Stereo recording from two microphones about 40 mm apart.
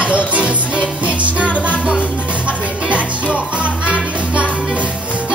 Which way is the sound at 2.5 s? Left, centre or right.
Right.